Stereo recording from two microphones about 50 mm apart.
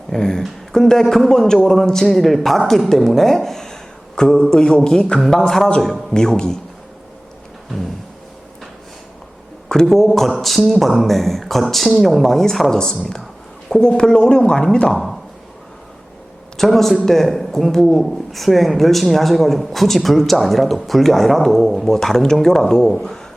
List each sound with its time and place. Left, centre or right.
0.1 s a man's voice: centre
9.6 s a man's voice: centre
12.7 s a man's voice: centre
14.9 s speech: centre
16.6 s a man's voice: centre